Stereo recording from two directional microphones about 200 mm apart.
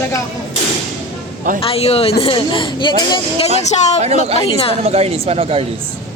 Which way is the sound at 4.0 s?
35° right (ahead or behind).